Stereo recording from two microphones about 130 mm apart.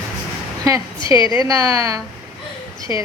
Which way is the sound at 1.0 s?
35° left (ahead or behind).